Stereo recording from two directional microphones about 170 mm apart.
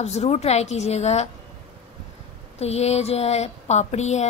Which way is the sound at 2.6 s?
40° left (ahead or behind).